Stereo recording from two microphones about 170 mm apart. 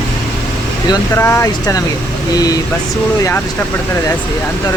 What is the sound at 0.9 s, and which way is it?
Speech, 15° left (ahead or behind).